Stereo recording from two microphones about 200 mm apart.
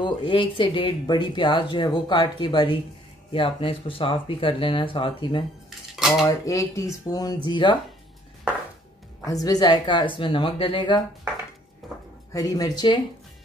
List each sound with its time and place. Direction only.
0.0 s speech: 25° left (ahead or behind)
9.2 s speech: 15° left (ahead or behind)
11.8 s a sound: centre (ahead or behind)
12.3 s speech: 15° left (ahead or behind)